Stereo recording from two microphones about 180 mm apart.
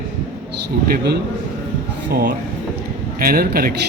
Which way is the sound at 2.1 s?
60° right (ahead or behind).